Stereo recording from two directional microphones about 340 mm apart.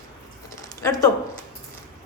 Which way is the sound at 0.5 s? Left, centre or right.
Centre.